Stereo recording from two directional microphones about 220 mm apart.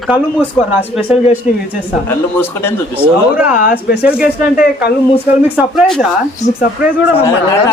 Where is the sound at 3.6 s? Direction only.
45° left (ahead or behind).